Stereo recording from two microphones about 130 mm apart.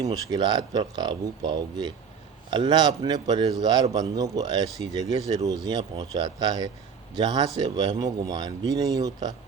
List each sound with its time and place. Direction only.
0.0 s speech: 30° right (ahead or behind)